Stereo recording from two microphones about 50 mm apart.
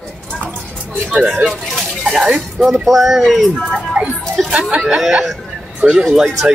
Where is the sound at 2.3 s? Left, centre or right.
Centre.